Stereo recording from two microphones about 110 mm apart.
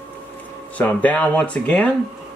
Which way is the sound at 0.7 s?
15° left (ahead or behind).